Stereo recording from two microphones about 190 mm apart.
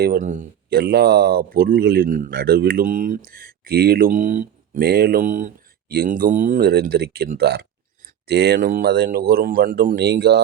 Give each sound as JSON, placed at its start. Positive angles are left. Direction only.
{"t": 0.0, "sound": "speech", "side_deg": -45}
{"t": 0.8, "sound": "speech", "side_deg": -55}
{"t": 2.3, "sound": "speech", "side_deg": -55}
{"t": 4.9, "sound": "speech", "side_deg": -55}